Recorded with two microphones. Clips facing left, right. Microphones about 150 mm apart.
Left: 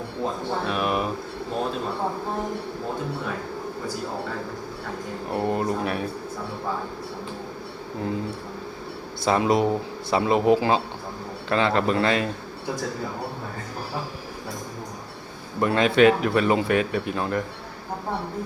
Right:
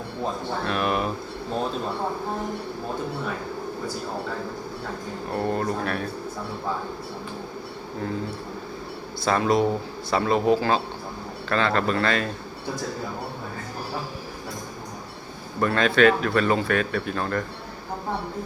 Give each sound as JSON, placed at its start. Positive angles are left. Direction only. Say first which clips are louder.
{"t": 0.7, "sound": "speech", "louder": "right 1 dB", "side_deg": 5}
{"t": 5.3, "sound": "speech", "louder": "left 1 dB", "side_deg": 15}
{"t": 9.2, "sound": "speech", "louder": "left 1 dB", "side_deg": 15}
{"t": 15.6, "sound": "speech", "louder": "left 1 dB", "side_deg": 20}